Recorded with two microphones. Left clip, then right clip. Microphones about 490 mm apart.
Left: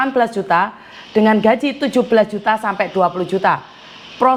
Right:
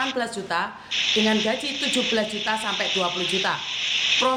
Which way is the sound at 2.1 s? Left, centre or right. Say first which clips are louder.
Left 10 dB; left.